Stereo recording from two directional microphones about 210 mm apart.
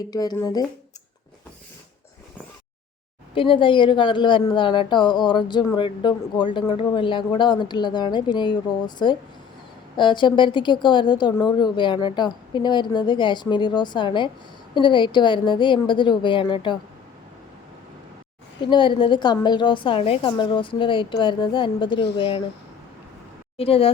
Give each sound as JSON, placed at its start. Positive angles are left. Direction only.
{"t": 0.0, "sound": "speech", "side_deg": 15}
{"t": 3.3, "sound": "a woman's voice", "side_deg": 25}
{"t": 18.6, "sound": "a woman's voice", "side_deg": 20}
{"t": 23.6, "sound": "a woman's voice", "side_deg": 25}